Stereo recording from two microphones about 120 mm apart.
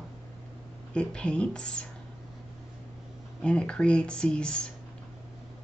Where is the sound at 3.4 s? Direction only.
10° left (ahead or behind).